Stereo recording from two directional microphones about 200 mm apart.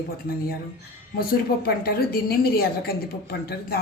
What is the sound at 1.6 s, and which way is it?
A woman's voice, 50° left (ahead or behind).